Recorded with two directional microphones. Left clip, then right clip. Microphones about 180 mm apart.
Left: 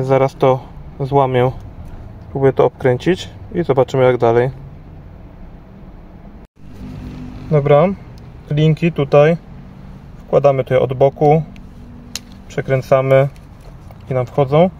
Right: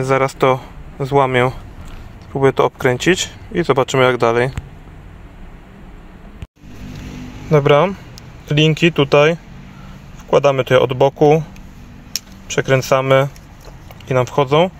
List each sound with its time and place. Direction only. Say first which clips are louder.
0.0 s speech: left 1 dB; 15° left (ahead or behind)
7.5 s speech: even; 5° right (ahead or behind)
12.4 s speech: right 1 dB; 5° right (ahead or behind)